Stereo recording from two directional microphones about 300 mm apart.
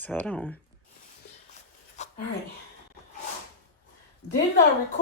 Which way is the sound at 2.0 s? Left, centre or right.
Left.